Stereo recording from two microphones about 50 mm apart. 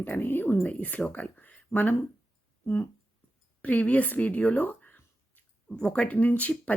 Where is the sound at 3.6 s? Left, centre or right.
Left.